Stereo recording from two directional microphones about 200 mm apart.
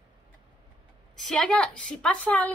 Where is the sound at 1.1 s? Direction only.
Centre (ahead or behind).